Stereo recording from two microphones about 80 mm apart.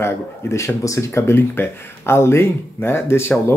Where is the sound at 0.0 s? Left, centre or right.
Left.